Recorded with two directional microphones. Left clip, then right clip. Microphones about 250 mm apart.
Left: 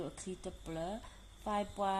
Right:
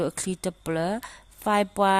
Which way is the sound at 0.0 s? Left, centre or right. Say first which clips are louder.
Right 15 dB; right.